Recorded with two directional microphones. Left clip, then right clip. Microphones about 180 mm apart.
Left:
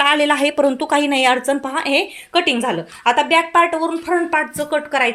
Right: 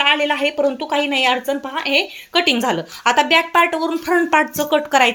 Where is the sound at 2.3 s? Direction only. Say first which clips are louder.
Right 1 dB; centre (ahead or behind).